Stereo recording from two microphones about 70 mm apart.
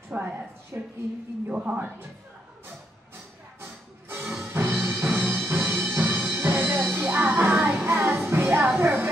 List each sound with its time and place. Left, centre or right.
0.1 s a sound: right
0.7 s a sound: right
1.5 s a woman's voice: centre
3.6 s music: right
7.5 s music: centre
7.8 s music: right